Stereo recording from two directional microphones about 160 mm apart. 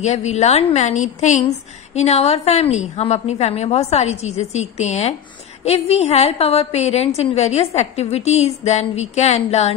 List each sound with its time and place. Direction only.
0.0 s a woman's voice: 45° left (ahead or behind)